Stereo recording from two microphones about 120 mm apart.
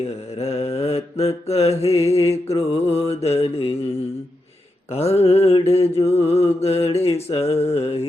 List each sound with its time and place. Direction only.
0.3 s mantra: 65° left (ahead or behind)
4.9 s mantra: 60° left (ahead or behind)